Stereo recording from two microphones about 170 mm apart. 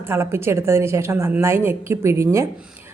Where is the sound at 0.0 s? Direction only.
15° right (ahead or behind).